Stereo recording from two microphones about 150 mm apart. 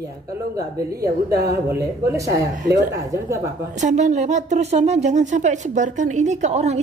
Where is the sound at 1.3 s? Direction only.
90° right.